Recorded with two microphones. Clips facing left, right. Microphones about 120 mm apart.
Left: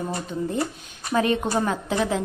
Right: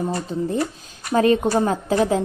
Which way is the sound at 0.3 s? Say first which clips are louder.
Right 3 dB; 35° right (ahead or behind).